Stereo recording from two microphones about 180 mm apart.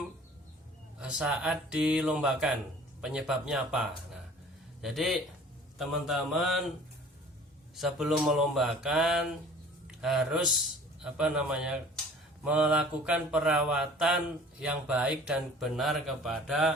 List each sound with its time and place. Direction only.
0.9 s speech: 5° right (ahead or behind)
7.8 s speech: centre (ahead or behind)